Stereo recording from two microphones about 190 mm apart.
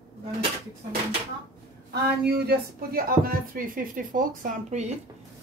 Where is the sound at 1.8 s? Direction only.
55° right (ahead or behind).